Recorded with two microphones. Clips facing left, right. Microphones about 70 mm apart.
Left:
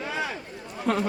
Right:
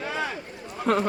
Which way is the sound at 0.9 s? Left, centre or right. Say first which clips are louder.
Right 2 dB; right.